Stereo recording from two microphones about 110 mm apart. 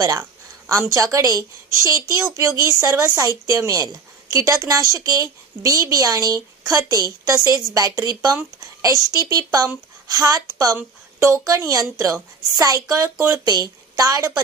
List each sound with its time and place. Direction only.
0.0 s a woman's voice: 35° right (ahead or behind)